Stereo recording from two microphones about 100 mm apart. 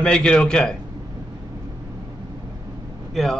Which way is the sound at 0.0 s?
10° left (ahead or behind).